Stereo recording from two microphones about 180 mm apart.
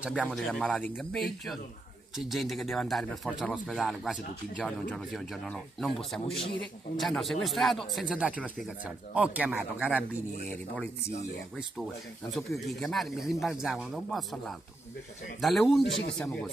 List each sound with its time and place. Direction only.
0.1 s a man's voice: 5° left (ahead or behind)
12.3 s a man's voice: centre (ahead or behind)